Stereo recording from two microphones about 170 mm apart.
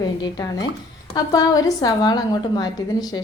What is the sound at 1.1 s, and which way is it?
A woman's voice, 20° left (ahead or behind).